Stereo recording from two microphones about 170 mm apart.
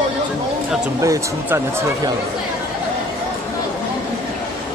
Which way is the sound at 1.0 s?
15° right (ahead or behind).